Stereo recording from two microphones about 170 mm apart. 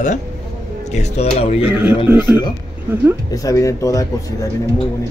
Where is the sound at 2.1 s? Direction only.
10° right (ahead or behind).